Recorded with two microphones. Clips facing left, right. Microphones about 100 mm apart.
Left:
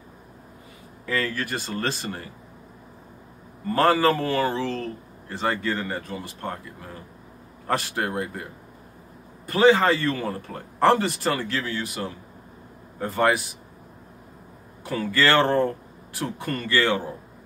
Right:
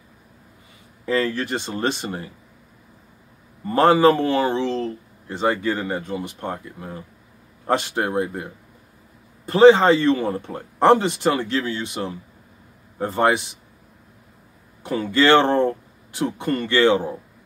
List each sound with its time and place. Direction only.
1.0 s speech: 25° right (ahead or behind)
3.6 s speech: 20° right (ahead or behind)
9.5 s speech: 25° right (ahead or behind)
14.8 s speech: 25° right (ahead or behind)